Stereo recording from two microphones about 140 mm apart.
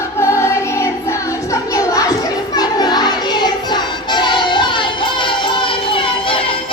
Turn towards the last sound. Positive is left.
turn(degrees=40)  # may be behind; listen again after turning